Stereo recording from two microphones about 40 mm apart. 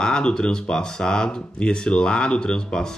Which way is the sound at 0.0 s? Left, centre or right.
Centre.